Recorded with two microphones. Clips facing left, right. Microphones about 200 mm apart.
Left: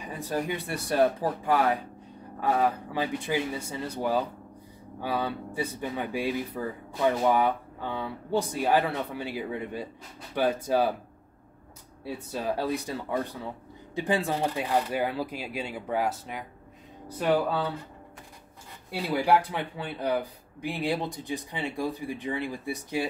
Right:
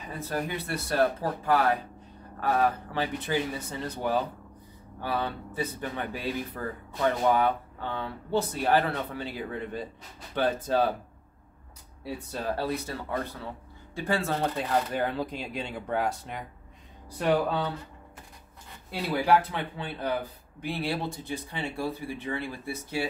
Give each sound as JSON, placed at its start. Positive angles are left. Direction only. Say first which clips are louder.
{"t": 0.0, "sound": "speech", "louder": "left 2 dB", "side_deg": 15}
{"t": 12.3, "sound": "speech", "louder": "left 2 dB", "side_deg": 10}
{"t": 18.9, "sound": "speech", "louder": "even", "side_deg": 15}